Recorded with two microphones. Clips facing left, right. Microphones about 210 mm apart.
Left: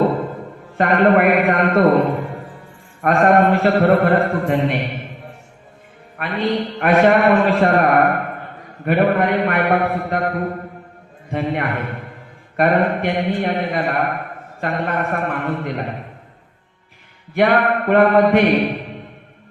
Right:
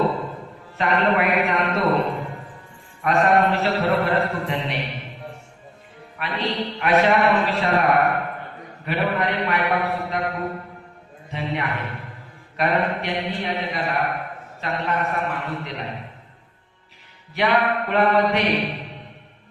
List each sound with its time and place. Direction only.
0.8 s a man's voice: 50° left (ahead or behind)
6.1 s a man's voice: 50° left (ahead or behind)
17.3 s a man's voice: 50° left (ahead or behind)